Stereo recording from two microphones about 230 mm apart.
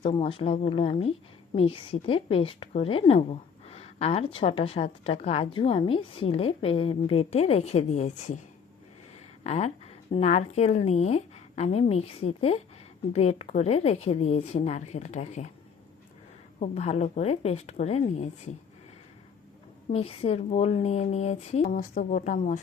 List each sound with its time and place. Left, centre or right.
0.0 s a woman's voice: left
9.4 s a woman's voice: left
16.6 s a woman's voice: left
19.9 s a woman's voice: left